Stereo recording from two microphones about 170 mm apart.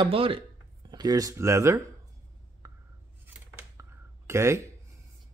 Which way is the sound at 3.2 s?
15° right (ahead or behind).